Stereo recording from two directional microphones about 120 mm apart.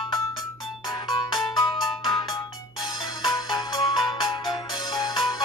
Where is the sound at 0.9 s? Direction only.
35° left (ahead or behind).